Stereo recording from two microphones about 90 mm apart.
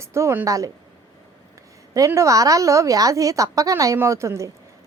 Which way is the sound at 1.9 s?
35° right (ahead or behind).